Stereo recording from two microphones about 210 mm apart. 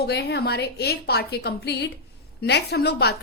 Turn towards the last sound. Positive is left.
turn(degrees=50)  # may be behind; listen again after turning